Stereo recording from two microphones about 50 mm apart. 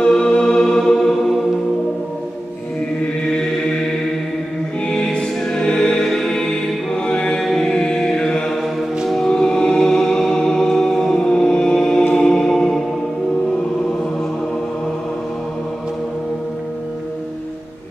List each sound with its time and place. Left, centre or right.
0.0 s music: centre
4.8 s music: centre
7.5 s chant: centre
9.0 s music: centre